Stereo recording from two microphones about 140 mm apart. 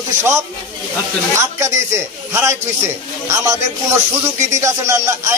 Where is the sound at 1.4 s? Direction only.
20° right (ahead or behind).